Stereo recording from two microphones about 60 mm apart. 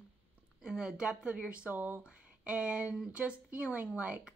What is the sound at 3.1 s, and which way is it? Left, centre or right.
Speech, right.